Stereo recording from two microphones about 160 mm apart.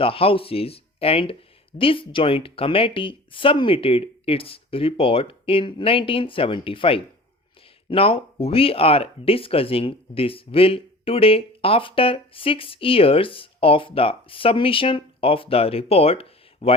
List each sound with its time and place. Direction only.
0.0 s speech: 35° left (ahead or behind)